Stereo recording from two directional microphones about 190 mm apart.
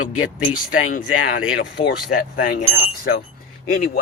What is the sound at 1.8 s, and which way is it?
Speech, 30° left (ahead or behind).